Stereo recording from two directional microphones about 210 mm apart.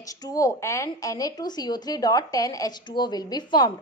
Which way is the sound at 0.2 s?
15° left (ahead or behind).